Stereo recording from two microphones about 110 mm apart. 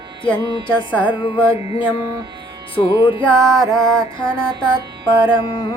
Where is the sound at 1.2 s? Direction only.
50° left (ahead or behind).